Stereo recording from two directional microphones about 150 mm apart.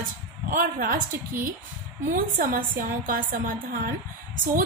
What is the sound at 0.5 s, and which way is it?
Speech, 70° right (ahead or behind).